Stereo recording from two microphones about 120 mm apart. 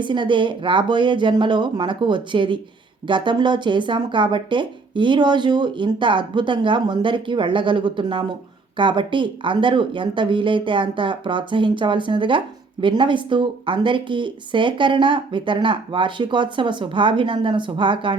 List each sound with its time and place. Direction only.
0.0 s speech: 40° right (ahead or behind)